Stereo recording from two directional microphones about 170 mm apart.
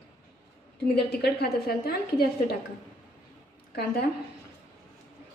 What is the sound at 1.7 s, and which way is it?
Speech, 65° left (ahead or behind).